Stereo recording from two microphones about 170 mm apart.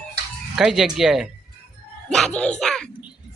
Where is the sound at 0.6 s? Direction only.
5° right (ahead or behind).